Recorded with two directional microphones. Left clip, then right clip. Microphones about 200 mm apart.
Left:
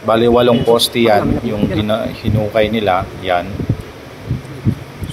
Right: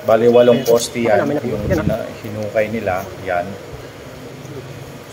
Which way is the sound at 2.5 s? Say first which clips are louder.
Left 4 dB; 15° left (ahead or behind).